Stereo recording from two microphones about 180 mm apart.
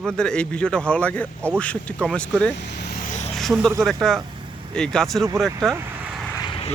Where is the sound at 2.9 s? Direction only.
45° left (ahead or behind).